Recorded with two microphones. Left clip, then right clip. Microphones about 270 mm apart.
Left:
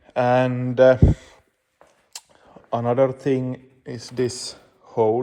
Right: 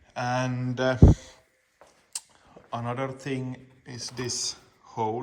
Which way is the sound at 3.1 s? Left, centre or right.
Right.